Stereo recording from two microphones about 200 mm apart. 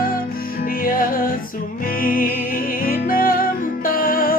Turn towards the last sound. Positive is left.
turn(degrees=45)  # may be behind; listen again after turning